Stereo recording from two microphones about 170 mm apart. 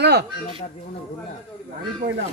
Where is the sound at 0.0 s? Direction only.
75° right (ahead or behind).